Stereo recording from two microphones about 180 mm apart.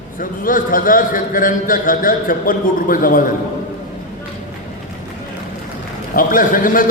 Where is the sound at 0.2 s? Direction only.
50° left (ahead or behind).